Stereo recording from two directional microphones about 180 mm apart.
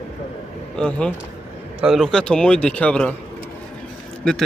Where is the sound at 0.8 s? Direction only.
5° left (ahead or behind).